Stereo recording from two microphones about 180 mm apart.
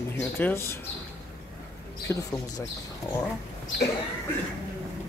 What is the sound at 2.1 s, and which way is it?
Speech, 15° left (ahead or behind).